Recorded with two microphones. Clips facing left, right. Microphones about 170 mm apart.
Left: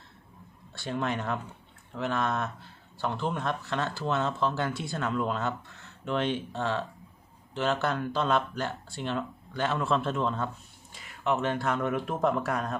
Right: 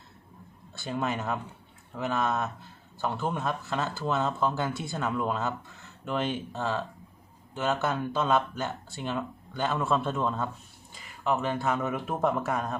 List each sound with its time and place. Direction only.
0.7 s speech: 5° right (ahead or behind)